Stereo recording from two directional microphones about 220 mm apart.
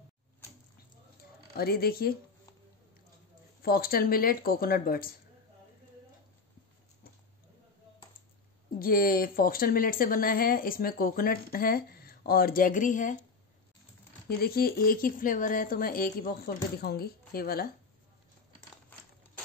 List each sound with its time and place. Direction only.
1.6 s a woman's voice: 45° left (ahead or behind)
3.6 s speech: 40° left (ahead or behind)
8.7 s speech: 40° left (ahead or behind)
14.3 s a woman's voice: 45° left (ahead or behind)